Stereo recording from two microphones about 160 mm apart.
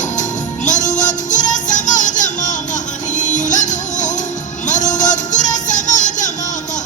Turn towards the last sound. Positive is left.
turn(degrees=50)  # may be behind; listen again after turning